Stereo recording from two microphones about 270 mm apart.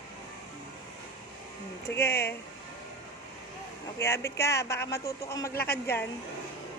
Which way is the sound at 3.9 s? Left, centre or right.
Centre.